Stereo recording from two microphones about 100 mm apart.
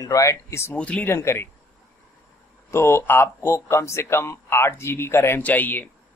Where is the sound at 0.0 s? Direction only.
35° left (ahead or behind).